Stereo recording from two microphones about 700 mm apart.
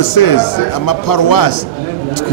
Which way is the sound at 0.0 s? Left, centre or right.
Left.